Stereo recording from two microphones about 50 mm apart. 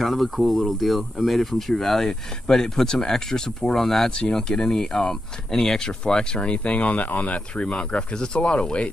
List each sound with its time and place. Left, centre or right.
0.0 s speech: centre; by 8.9 s left